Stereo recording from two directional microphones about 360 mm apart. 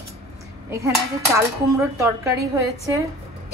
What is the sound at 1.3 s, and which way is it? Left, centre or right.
Speech, centre.